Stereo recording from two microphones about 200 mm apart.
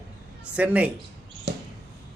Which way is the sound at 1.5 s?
55° right (ahead or behind).